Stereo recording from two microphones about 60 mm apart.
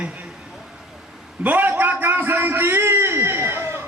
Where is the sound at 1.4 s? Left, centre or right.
Right.